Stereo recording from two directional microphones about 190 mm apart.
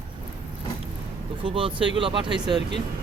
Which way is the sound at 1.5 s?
25° right (ahead or behind).